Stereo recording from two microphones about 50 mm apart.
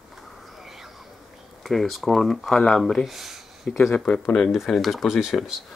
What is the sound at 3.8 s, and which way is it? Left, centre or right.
Speech, centre.